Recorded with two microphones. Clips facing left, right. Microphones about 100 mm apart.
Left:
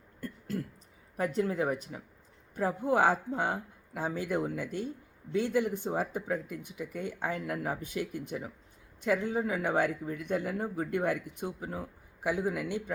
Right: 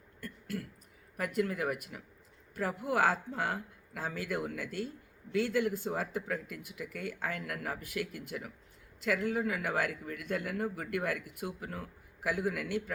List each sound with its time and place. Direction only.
0.2 s throat clearing: 30° left (ahead or behind)
1.1 s speech: 25° left (ahead or behind)